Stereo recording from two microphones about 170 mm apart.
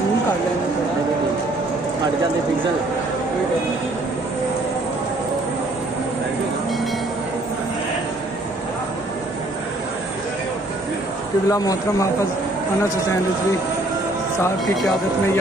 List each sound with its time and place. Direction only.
11.4 s speech: 20° left (ahead or behind)